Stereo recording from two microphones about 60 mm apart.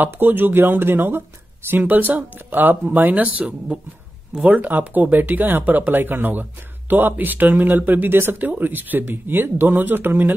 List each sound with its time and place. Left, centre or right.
0.0 s speech: right